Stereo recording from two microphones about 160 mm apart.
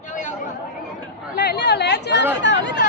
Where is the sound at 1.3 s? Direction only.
75° left (ahead or behind); by 2.2 s 90° left.